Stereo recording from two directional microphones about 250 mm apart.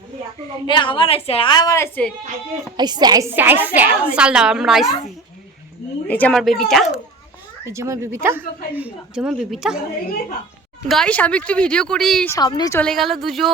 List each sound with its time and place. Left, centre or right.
0.7 s a woman's voice: centre
2.7 s a woman's voice: centre
6.1 s speech: centre
7.6 s a woman's voice: centre
10.8 s speech: centre
12.8 s speech: centre